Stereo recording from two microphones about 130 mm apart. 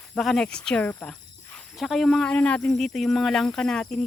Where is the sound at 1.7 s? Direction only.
Centre (ahead or behind).